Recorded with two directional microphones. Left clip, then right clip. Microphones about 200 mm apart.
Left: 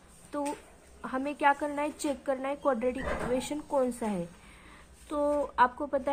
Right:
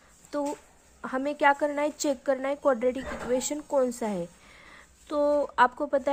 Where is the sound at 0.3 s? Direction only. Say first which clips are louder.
Right 4 dB; 35° right (ahead or behind).